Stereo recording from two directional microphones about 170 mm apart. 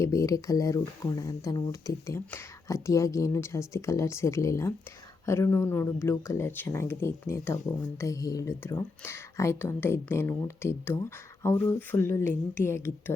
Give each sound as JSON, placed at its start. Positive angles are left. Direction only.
{"t": 0.0, "sound": "speech", "side_deg": 15}